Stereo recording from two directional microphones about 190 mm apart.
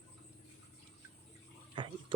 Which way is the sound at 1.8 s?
25° right (ahead or behind).